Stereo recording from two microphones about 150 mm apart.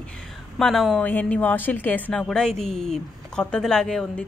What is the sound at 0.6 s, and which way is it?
A woman's voice, centre (ahead or behind).